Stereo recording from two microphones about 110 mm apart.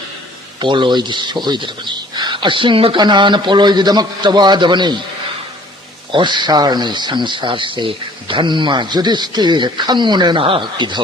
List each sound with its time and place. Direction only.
0.6 s speech: 45° right (ahead or behind)
6.1 s speech: 45° right (ahead or behind)